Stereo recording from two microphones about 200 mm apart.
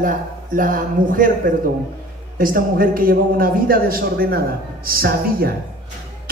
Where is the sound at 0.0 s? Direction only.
40° right (ahead or behind).